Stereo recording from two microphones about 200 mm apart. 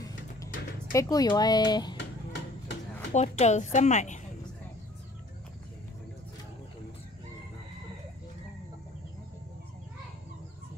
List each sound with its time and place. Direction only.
0.9 s speech: 15° left (ahead or behind)
2.0 s a sound: 60° left (ahead or behind)
3.1 s a woman's voice: 35° left (ahead or behind)